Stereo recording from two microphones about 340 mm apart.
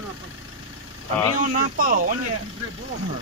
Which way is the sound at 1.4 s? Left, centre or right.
Right.